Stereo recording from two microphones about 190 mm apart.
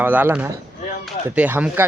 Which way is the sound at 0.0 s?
10° right (ahead or behind).